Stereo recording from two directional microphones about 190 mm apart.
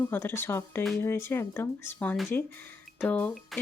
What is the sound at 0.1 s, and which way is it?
Speech, 10° left (ahead or behind).